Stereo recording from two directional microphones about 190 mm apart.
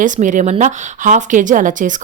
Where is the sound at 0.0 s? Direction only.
40° right (ahead or behind).